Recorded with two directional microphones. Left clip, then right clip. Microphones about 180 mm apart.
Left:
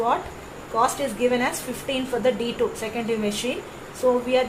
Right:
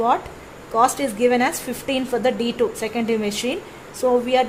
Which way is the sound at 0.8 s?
60° right (ahead or behind).